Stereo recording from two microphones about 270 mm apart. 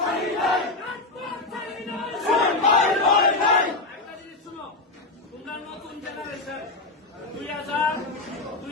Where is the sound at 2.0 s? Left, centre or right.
Centre.